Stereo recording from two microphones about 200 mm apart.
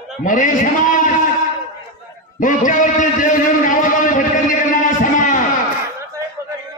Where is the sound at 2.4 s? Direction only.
40° left (ahead or behind).